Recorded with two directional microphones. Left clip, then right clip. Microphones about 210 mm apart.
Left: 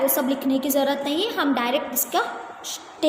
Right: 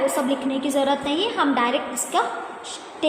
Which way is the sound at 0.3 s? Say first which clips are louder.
Even; 40° left (ahead or behind).